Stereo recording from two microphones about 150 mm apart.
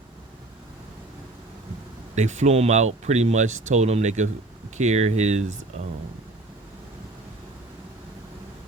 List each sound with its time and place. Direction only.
2.1 s speech: 50° right (ahead or behind)